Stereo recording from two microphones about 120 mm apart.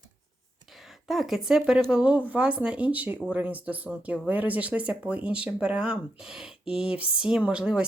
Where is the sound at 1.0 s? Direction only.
Centre (ahead or behind).